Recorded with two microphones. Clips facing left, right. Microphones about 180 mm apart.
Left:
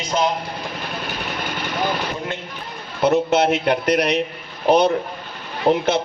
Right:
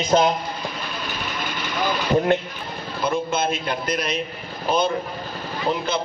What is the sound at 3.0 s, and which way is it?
A man's voice, 75° left (ahead or behind).